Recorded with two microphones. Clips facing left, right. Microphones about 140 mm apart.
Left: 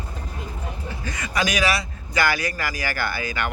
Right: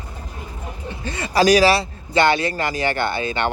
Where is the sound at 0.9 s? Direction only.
30° right (ahead or behind).